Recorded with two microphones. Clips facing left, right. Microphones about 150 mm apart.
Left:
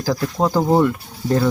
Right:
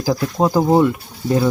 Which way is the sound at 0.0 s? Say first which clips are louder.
Right 2 dB; 15° right (ahead or behind).